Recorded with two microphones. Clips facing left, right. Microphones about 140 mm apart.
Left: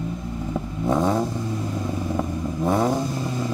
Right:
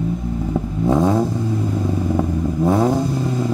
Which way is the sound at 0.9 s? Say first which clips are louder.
Right 4 dB; 15° right (ahead or behind).